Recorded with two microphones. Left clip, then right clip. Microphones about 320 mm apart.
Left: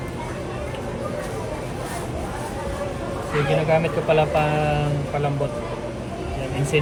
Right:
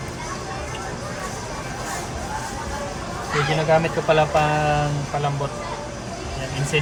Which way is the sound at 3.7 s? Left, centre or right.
Centre.